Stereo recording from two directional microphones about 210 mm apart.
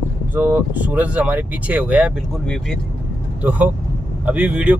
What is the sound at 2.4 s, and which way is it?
Speech, 5° left (ahead or behind).